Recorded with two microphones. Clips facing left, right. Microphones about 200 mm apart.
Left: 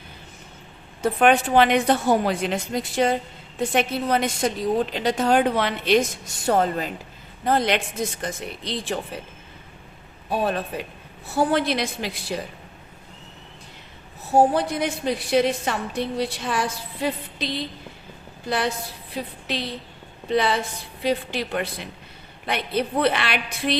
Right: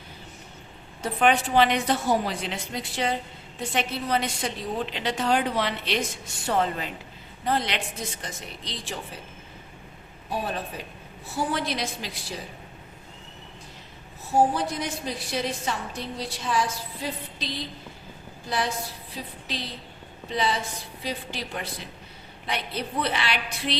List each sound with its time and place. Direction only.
1.2 s a woman's voice: 55° left (ahead or behind)
10.7 s a woman's voice: 60° left (ahead or behind)
14.5 s a woman's voice: 60° left (ahead or behind)